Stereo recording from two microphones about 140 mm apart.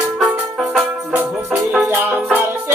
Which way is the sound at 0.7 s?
10° right (ahead or behind).